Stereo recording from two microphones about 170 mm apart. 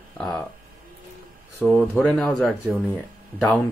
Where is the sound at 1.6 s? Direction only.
10° left (ahead or behind).